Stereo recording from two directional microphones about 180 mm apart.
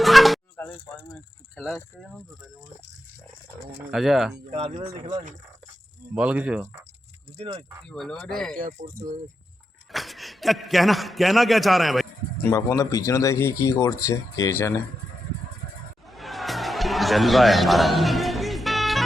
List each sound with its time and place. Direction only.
0.0 s a sound: centre (ahead or behind)
1.1 s speech: centre (ahead or behind)
3.9 s a man's voice: centre (ahead or behind)
4.5 s speech: 40° right (ahead or behind)
6.1 s speech: 5° right (ahead or behind)
7.3 s speech: 35° right (ahead or behind)
7.9 s a man's voice: 5° left (ahead or behind)
8.5 s speech: 50° right (ahead or behind)
9.9 s a man's voice: centre (ahead or behind)
12.4 s speech: 15° left (ahead or behind)
16.0 s a sound: centre (ahead or behind)